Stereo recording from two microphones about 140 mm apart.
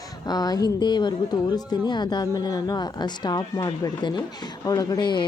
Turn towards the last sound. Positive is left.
turn(degrees=35)  # may be behind; listen again after turning